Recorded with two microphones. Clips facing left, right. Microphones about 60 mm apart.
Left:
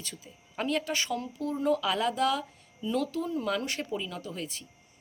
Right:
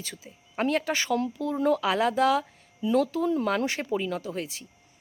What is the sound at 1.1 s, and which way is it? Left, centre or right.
Speech, right.